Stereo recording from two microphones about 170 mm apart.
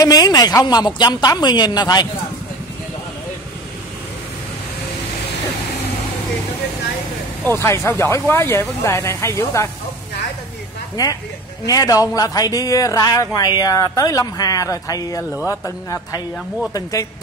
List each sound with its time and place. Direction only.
0.0 s a man's voice: 20° left (ahead or behind)
7.6 s speech: 15° left (ahead or behind)
11.0 s a man's voice: 20° left (ahead or behind)